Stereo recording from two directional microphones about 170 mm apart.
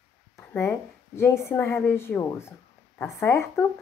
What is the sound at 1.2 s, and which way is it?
A woman's voice, 15° left (ahead or behind).